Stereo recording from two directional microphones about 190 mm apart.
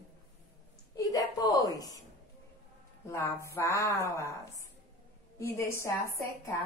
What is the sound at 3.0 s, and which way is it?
A woman's voice, 15° left (ahead or behind).